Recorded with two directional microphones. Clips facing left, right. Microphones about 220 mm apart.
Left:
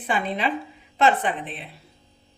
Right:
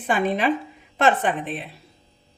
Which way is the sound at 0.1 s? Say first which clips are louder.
Right 4 dB; 45° right (ahead or behind).